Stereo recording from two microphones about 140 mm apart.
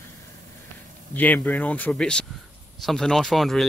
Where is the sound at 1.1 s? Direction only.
10° left (ahead or behind).